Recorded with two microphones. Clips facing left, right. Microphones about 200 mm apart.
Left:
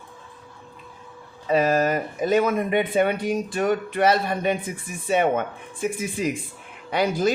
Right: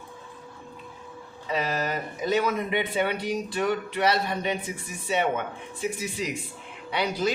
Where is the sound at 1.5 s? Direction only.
50° left (ahead or behind).